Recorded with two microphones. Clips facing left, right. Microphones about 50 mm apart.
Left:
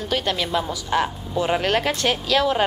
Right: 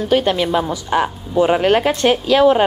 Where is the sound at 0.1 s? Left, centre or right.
Right.